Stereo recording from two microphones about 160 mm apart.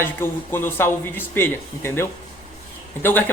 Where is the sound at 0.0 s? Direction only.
15° left (ahead or behind).